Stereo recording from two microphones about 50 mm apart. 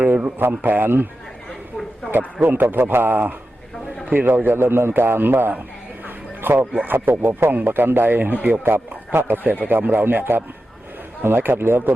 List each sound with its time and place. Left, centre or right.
0.0 s a sound: right
0.3 s speech: right
2.0 s speech: right
6.6 s speech: right
6.9 s speech: right
7.5 s speech: right
8.6 s speech: right